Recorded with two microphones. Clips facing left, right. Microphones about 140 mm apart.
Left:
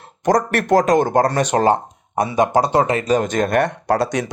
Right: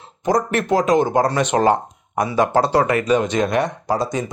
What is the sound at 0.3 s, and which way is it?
Speech, 80° left.